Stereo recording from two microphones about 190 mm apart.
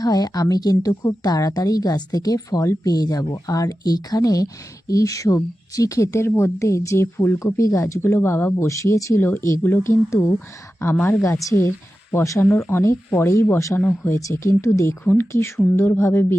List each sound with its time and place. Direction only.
0.0 s speech: 20° left (ahead or behind)